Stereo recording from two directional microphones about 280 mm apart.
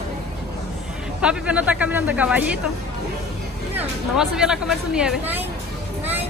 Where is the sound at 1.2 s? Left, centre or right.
Centre.